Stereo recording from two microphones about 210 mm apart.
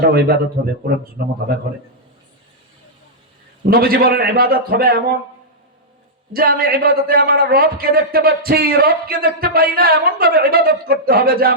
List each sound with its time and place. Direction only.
0.1 s a man's voice: 45° right (ahead or behind)
3.7 s a man's voice: 45° right (ahead or behind)
6.3 s a man's voice: 45° right (ahead or behind)